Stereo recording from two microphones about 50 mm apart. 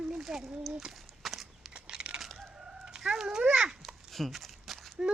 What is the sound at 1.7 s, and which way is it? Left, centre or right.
Crumpling, centre.